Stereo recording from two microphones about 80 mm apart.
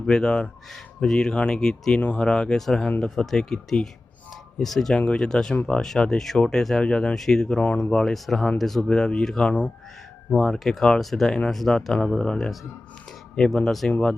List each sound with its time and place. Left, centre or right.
0.0 s speech: centre
9.5 s speech: centre
13.7 s speech: centre